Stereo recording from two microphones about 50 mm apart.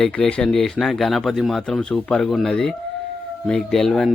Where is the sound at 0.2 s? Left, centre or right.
Left.